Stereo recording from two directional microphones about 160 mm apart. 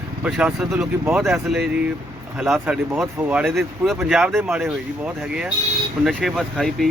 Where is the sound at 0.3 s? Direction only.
Centre (ahead or behind).